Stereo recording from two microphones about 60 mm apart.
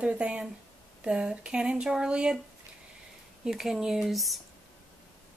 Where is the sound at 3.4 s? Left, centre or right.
Centre.